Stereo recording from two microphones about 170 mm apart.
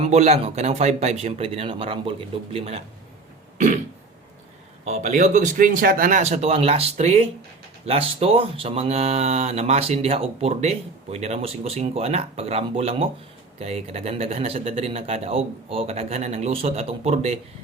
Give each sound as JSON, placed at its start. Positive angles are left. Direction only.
{"t": 0.0, "sound": "speech", "side_deg": -40}
{"t": 4.9, "sound": "speech", "side_deg": -45}